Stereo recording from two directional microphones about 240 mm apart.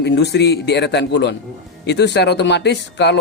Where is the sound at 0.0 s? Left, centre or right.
Left.